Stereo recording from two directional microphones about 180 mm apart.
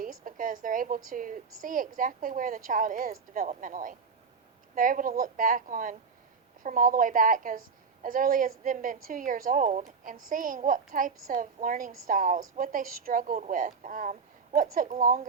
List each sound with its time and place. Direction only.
0.0 s a woman's voice: 50° right (ahead or behind)